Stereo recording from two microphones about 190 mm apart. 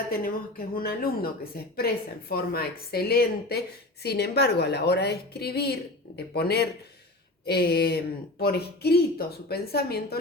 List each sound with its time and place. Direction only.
0.1 s a woman's voice: 50° left (ahead or behind)